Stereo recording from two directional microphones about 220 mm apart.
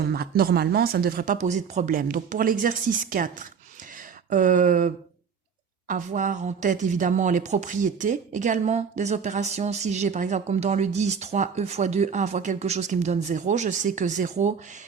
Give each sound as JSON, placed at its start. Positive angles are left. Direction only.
{"t": 0.0, "sound": "a woman's voice", "side_deg": -45}
{"t": 5.9, "sound": "a woman's voice", "side_deg": -35}